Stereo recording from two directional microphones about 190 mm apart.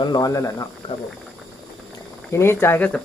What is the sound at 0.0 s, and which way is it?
Speech, 20° left (ahead or behind).